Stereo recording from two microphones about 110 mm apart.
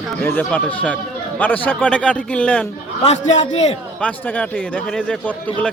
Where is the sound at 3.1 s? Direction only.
90° left.